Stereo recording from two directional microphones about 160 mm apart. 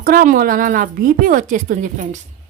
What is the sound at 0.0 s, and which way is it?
A woman's voice, 60° right (ahead or behind).